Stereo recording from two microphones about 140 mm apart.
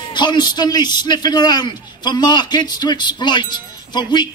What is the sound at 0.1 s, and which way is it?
A man's voice, 30° left (ahead or behind).